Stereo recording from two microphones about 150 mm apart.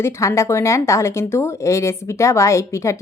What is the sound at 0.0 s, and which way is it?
Speech, 20° left (ahead or behind).